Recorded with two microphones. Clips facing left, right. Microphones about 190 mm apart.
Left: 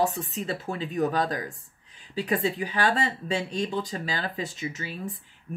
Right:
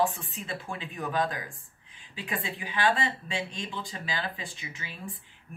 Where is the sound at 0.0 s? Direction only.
40° left (ahead or behind).